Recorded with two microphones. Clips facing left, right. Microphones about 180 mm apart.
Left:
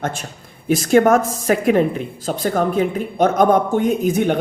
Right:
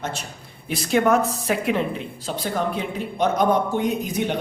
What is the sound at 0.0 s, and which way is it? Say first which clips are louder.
Speech: left 5 dB; 50° left (ahead or behind).